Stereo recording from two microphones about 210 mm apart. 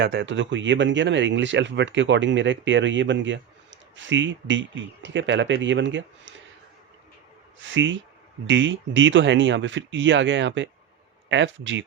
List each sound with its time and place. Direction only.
0.0 s speech: 55° right (ahead or behind)
7.6 s speech: 60° right (ahead or behind)